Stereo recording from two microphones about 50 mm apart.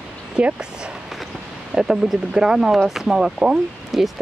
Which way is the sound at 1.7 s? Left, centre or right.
Centre.